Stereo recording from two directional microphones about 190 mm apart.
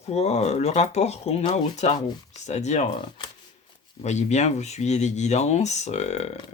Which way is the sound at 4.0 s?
35° left (ahead or behind).